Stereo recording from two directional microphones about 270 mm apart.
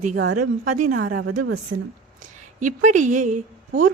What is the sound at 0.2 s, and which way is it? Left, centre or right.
Speech, right.